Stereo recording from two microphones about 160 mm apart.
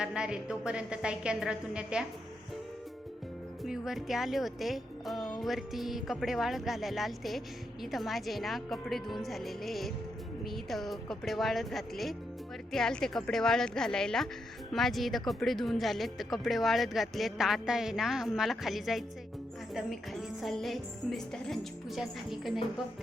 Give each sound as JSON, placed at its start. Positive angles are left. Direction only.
{"t": 0.0, "sound": "music", "side_deg": -5}
{"t": 3.6, "sound": "speech", "side_deg": 0}
{"t": 5.4, "sound": "music", "side_deg": 0}